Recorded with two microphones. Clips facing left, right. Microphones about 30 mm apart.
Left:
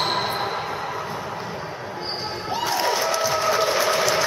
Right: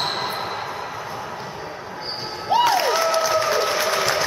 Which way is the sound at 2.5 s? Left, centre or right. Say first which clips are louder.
Right 8 dB; right.